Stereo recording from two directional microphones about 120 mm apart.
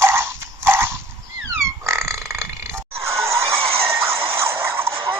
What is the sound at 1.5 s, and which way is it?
Pig, 25° right (ahead or behind).